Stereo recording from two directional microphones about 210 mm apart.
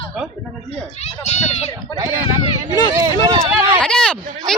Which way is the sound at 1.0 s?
30° left (ahead or behind).